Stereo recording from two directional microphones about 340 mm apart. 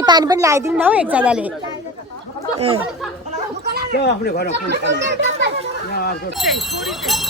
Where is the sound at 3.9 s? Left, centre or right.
Left.